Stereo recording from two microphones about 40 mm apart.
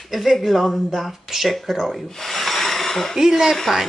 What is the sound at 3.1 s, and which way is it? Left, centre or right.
Speech, centre.